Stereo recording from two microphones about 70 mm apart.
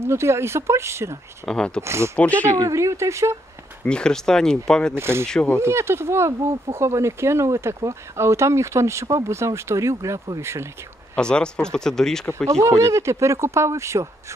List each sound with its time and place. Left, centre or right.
0.0 s speech: right
1.4 s speech: centre
1.8 s speech: right
2.1 s speech: centre
2.5 s speech: right
3.8 s speech: centre
4.9 s speech: right
5.2 s speech: centre
5.6 s speech: right
11.1 s speech: centre
12.6 s speech: right